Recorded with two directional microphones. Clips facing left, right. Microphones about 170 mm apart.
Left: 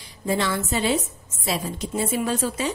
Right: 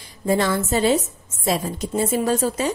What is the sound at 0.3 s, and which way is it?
A woman's voice, 45° right (ahead or behind).